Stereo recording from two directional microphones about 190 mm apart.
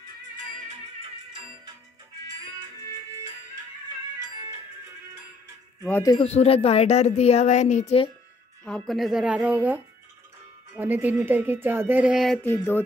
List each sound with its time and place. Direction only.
5.9 s music: 10° left (ahead or behind)
6.1 s speech: 30° left (ahead or behind)
8.6 s speech: centre (ahead or behind)
12.4 s music: 10° left (ahead or behind)